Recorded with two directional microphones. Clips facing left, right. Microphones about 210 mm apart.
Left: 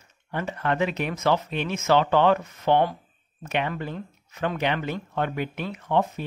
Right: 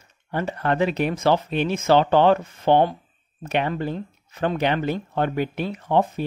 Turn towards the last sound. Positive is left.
turn(degrees=-30)  # may be behind; listen again after turning